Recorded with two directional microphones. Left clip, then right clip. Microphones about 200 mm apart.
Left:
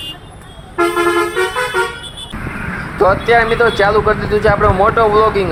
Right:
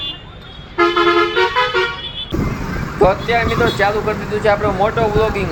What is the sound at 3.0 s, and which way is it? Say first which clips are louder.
Speech: left 4 dB; 15° left (ahead or behind).